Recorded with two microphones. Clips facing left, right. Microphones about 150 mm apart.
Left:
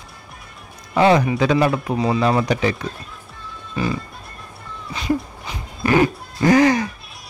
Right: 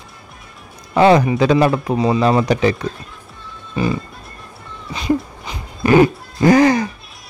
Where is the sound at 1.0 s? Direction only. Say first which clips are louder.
Right 3 dB; 35° right (ahead or behind).